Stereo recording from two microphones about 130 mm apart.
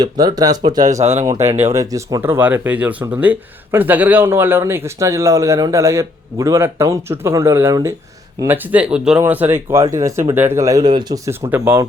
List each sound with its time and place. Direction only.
0.0 s a man's voice: 30° right (ahead or behind)
1.0 s speech: 60° right (ahead or behind)
1.5 s a man's voice: 20° right (ahead or behind)
2.2 s a man's voice: 15° right (ahead or behind)
11.3 s speech: 15° right (ahead or behind)